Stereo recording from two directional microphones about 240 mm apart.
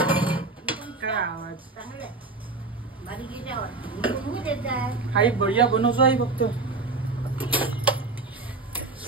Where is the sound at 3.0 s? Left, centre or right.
Centre.